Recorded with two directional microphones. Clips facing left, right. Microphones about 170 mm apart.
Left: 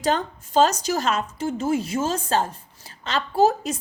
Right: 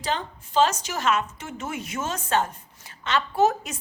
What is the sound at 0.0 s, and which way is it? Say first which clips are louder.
A woman's voice: left 6 dB; 45° left (ahead or behind).